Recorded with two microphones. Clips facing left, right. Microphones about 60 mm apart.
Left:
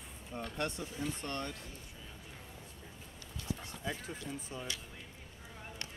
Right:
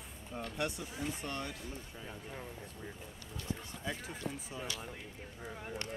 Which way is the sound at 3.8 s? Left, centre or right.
Centre.